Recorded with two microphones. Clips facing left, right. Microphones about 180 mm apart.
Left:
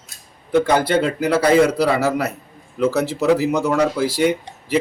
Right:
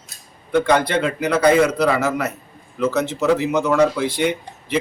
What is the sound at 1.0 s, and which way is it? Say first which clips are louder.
Speech: even; 30° left (ahead or behind).